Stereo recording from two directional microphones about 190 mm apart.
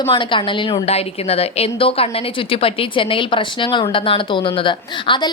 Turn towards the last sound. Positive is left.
turn(degrees=25)  # may be behind; listen again after turning